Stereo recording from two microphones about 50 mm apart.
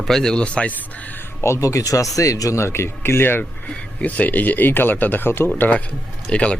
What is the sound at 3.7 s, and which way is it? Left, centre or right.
Speech, left.